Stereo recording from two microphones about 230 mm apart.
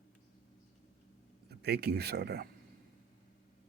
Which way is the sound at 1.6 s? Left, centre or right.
Right.